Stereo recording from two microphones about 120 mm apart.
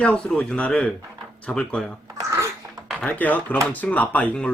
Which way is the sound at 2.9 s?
5° left (ahead or behind).